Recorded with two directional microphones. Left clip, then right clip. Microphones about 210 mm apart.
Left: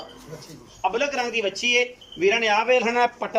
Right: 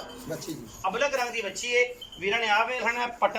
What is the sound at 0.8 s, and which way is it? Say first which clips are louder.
A man's voice: left 3 dB; 40° left (ahead or behind).